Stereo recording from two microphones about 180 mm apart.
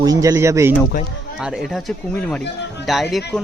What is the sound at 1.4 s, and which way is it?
Speech, centre (ahead or behind).